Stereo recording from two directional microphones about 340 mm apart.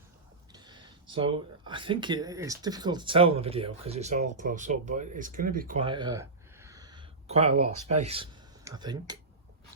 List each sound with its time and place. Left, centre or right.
0.5 s speech: centre